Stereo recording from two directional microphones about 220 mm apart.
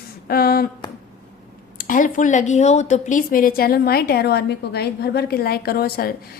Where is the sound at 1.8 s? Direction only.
40° left (ahead or behind).